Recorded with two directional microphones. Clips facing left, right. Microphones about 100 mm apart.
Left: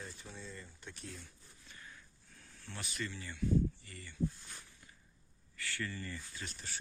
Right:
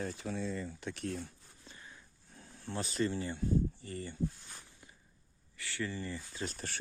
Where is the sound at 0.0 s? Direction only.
90° right; by 1.3 s 65° right (ahead or behind).